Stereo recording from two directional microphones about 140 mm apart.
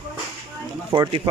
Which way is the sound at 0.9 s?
35° right (ahead or behind).